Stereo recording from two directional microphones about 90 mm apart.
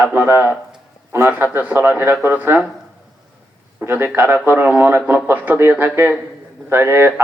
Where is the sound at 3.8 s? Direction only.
25° right (ahead or behind).